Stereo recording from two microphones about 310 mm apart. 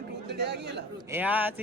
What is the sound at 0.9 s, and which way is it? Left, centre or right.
Speech, centre.